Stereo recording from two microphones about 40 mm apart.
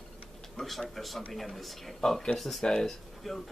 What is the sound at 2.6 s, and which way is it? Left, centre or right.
Speech, centre.